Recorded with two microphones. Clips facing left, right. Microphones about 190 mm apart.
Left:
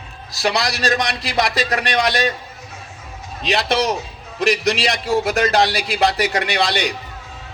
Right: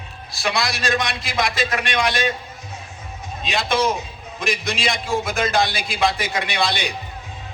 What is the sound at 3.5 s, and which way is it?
A man's voice, 35° left (ahead or behind).